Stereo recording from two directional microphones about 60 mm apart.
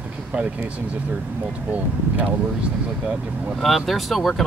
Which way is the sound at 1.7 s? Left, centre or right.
Right.